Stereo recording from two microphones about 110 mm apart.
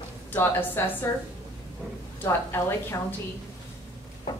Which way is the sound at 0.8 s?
20° left (ahead or behind).